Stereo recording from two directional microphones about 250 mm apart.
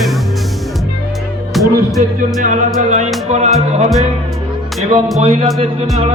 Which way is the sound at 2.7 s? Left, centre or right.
Right.